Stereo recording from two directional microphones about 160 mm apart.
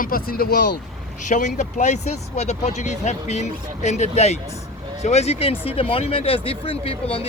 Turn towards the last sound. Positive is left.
turn(degrees=40)  # may be behind; listen again after turning